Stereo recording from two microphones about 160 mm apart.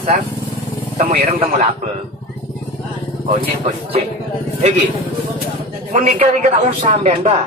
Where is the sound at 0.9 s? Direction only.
40° right (ahead or behind).